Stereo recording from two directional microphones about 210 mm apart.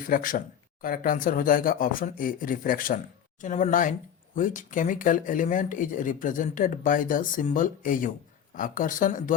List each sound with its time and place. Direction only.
0.1 s speech: 40° left (ahead or behind)